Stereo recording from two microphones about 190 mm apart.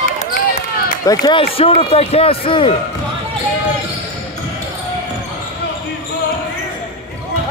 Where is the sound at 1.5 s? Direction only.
30° left (ahead or behind).